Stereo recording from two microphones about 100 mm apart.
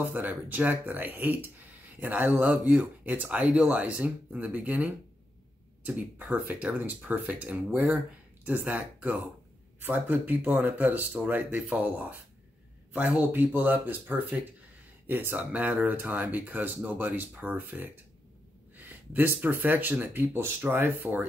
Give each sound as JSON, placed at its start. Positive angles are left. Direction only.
{"t": 0.0, "sound": "speech", "side_deg": -20}